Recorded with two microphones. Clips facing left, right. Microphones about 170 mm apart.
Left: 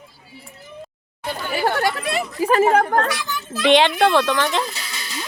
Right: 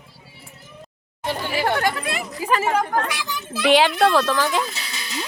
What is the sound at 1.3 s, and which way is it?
Speech, 25° right (ahead or behind).